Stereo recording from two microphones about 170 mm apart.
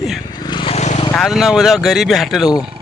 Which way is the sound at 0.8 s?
45° left (ahead or behind).